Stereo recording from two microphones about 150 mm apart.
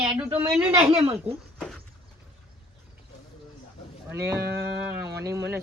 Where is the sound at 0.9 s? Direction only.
40° right (ahead or behind).